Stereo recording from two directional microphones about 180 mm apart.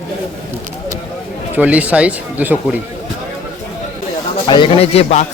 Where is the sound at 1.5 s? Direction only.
10° right (ahead or behind).